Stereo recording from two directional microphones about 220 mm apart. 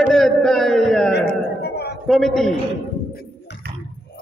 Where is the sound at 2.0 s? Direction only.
Centre (ahead or behind).